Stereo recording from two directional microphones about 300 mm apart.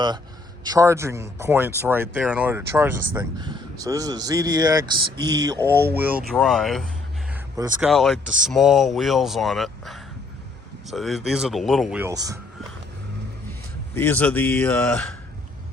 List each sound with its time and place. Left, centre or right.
0.6 s speech: centre
5.7 s speech: right
6.0 s speech: centre
7.3 s a sound: centre
7.9 s speech: centre
13.9 s speech: centre